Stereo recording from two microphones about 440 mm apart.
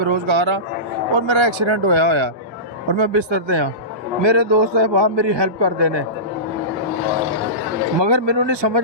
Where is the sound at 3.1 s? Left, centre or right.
Right.